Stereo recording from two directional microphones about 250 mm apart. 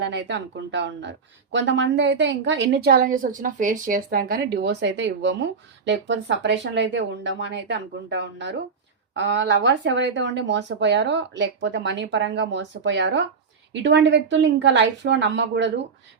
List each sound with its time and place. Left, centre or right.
0.0 s a woman's voice: right